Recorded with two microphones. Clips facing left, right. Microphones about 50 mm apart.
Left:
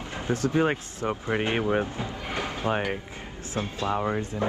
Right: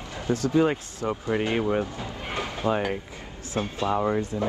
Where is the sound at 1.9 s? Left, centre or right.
Left.